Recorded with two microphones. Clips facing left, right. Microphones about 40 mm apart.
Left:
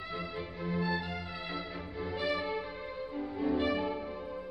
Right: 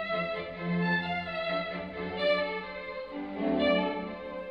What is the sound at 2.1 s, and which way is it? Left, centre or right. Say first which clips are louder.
Music: right 5 dB; right.